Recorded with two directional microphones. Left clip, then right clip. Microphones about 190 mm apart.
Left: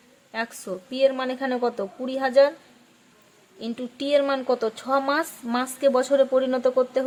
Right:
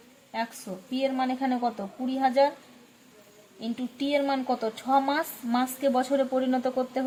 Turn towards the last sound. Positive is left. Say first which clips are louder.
# left 6 dB
turn(degrees=30)  # may be behind; listen again after turning